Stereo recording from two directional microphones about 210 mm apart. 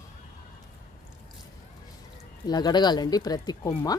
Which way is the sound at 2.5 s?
20° left (ahead or behind).